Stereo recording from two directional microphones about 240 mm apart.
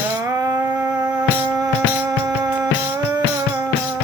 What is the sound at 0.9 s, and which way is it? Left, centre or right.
Music, centre.